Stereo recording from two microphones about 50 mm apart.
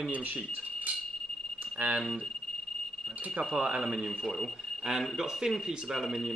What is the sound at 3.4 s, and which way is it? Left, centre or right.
Speech, right.